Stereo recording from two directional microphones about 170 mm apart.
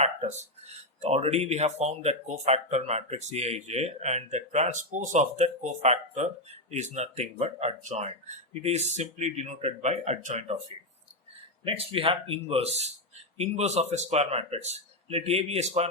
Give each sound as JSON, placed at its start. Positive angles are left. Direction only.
{"t": 1.0, "sound": "speech", "side_deg": -40}
{"t": 11.6, "sound": "speech", "side_deg": -35}